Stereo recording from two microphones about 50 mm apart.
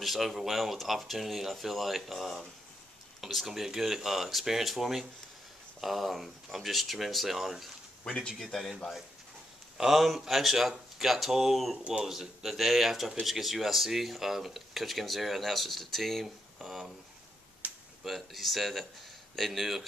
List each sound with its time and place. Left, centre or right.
0.0 s speech: centre
16.6 s speech: centre
17.6 s a sound: right
18.0 s speech: centre